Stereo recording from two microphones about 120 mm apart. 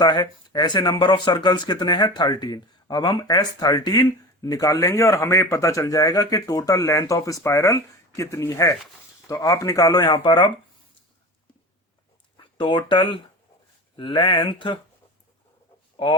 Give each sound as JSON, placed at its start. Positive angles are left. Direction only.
{"t": 0.0, "sound": "speech", "side_deg": 35}
{"t": 12.5, "sound": "speech", "side_deg": 40}